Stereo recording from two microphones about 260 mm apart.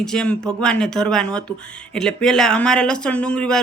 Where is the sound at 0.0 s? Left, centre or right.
Centre.